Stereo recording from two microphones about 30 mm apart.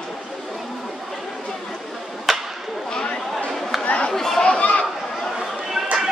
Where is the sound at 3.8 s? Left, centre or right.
Left.